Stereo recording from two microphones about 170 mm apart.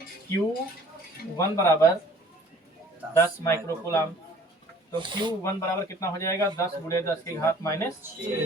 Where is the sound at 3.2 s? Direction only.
15° left (ahead or behind).